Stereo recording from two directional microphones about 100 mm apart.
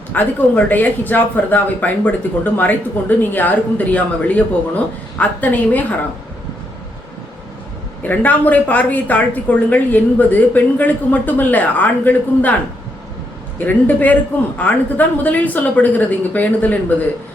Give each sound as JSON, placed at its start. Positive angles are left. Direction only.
{"t": 0.1, "sound": "a woman's voice", "side_deg": 20}
{"t": 8.0, "sound": "a woman's voice", "side_deg": 15}
{"t": 13.7, "sound": "a woman's voice", "side_deg": 15}